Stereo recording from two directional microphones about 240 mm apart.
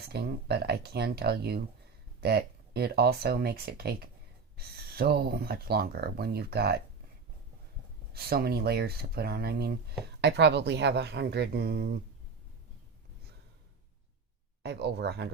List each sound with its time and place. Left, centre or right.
0.1 s speech: right
8.1 s speech: right
14.6 s speech: right